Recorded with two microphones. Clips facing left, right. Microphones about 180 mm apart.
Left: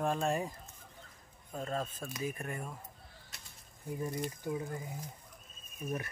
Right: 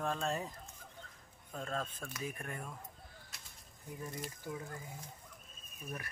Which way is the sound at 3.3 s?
Centre (ahead or behind).